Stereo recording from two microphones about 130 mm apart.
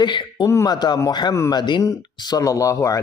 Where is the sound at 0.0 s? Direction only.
35° left (ahead or behind).